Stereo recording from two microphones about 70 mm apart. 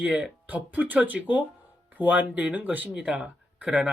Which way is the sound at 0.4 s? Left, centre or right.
Right.